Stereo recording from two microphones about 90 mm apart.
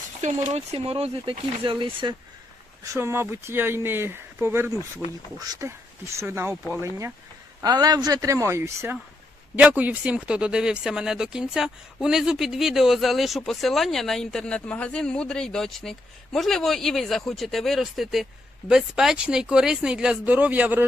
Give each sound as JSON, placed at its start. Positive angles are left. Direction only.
{"t": 0.9, "sound": "speech", "side_deg": -90}
{"t": 2.8, "sound": "speech", "side_deg": -35}
{"t": 6.2, "sound": "speech", "side_deg": -25}
{"t": 7.6, "sound": "speech", "side_deg": -50}
{"t": 9.6, "sound": "speech", "side_deg": -15}